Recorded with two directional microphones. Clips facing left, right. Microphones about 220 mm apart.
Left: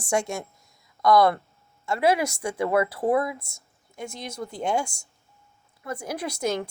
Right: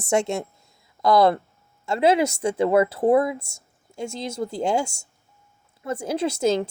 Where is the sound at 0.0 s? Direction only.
25° right (ahead or behind).